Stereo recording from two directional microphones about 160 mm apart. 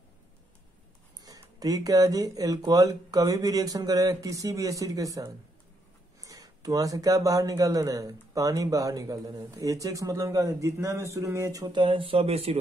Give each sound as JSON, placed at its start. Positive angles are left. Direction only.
{"t": 1.2, "sound": "speech", "side_deg": -25}